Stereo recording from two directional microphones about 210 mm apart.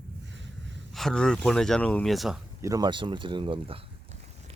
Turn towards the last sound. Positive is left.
turn(degrees=-25)  # may be behind; listen again after turning